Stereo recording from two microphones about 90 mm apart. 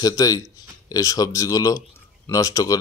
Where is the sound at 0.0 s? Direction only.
40° left (ahead or behind).